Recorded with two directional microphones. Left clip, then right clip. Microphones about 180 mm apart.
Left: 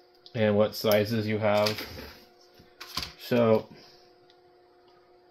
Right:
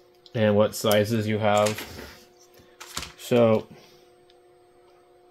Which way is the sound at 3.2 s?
40° right (ahead or behind).